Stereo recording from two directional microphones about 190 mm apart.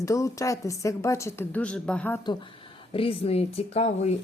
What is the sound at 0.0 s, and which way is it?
A woman's voice, 15° left (ahead or behind).